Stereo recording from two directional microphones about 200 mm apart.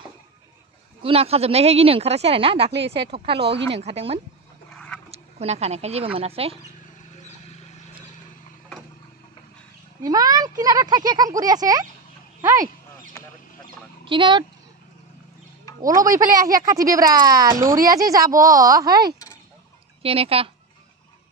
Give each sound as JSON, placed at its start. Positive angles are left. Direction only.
{"t": 1.0, "sound": "speech", "side_deg": -30}
{"t": 3.3, "sound": "speech", "side_deg": -60}
{"t": 3.7, "sound": "speech", "side_deg": -30}
{"t": 4.7, "sound": "a sound", "side_deg": 5}
{"t": 5.1, "sound": "speech", "side_deg": -30}
{"t": 7.2, "sound": "a sound", "side_deg": 35}
{"t": 10.0, "sound": "speech", "side_deg": -20}
{"t": 14.0, "sound": "speech", "side_deg": -25}
{"t": 15.8, "sound": "speech", "side_deg": -15}